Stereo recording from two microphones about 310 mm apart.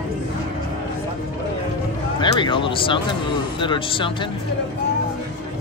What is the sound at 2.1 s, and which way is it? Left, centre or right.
Speech, centre.